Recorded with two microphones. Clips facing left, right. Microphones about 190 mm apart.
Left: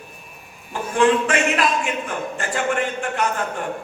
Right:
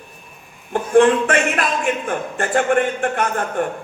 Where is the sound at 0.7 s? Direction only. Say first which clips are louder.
Right 5 dB; 55° right (ahead or behind).